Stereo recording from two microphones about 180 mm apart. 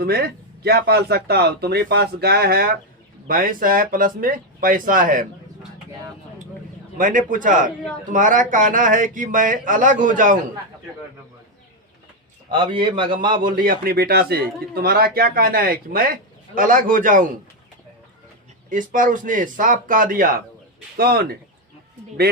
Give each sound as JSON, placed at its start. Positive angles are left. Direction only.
{"t": 0.0, "sound": "a man's voice", "side_deg": -60}
{"t": 6.9, "sound": "speech", "side_deg": -45}
{"t": 12.5, "sound": "a man's voice", "side_deg": -25}
{"t": 13.4, "sound": "a man's voice", "side_deg": -55}
{"t": 18.7, "sound": "a man's voice", "side_deg": -45}